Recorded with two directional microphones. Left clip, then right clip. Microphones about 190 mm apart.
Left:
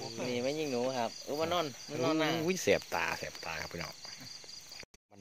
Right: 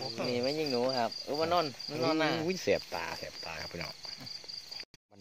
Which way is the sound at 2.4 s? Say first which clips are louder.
Left 1 dB; 20° left (ahead or behind).